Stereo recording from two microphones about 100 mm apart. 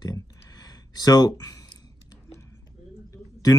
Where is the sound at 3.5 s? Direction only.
40° left (ahead or behind).